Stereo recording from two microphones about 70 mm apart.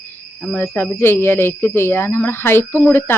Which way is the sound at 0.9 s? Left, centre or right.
Left.